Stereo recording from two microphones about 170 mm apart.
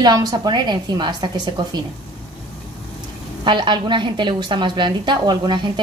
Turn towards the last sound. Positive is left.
turn(degrees=-25)  # may be behind; listen again after turning